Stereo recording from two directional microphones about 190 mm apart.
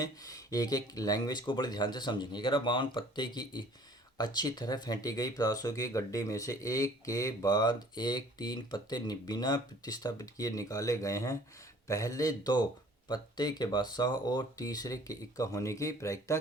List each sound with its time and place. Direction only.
0.0 s speech: 20° left (ahead or behind)